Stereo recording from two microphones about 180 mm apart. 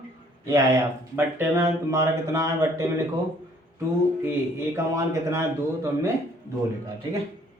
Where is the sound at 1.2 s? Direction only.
10° right (ahead or behind).